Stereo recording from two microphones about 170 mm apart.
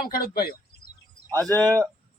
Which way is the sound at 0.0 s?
60° left (ahead or behind).